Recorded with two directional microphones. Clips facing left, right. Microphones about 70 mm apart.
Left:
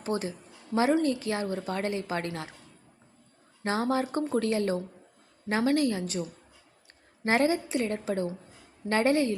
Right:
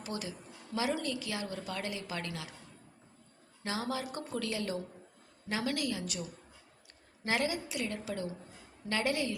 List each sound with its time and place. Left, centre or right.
0.0 s a woman's voice: left
3.6 s a woman's voice: left